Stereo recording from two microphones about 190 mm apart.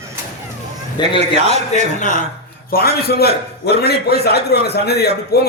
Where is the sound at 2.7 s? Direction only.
55° left (ahead or behind).